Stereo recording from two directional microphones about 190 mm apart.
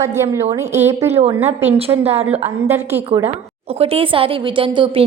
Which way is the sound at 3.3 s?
30° right (ahead or behind).